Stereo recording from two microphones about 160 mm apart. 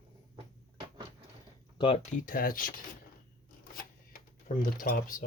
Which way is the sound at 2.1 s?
60° left (ahead or behind).